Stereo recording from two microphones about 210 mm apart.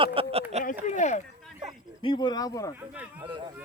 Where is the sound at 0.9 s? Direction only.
35° left (ahead or behind).